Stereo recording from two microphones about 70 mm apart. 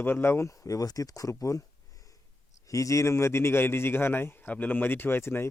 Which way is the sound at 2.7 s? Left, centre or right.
Left.